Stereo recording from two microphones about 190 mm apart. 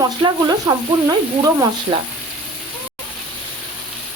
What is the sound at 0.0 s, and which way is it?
Speech, 25° right (ahead or behind).